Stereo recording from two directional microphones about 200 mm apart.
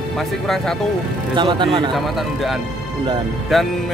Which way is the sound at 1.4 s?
25° right (ahead or behind).